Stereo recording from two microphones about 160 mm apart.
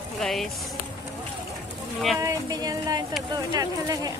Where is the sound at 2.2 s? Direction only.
25° right (ahead or behind).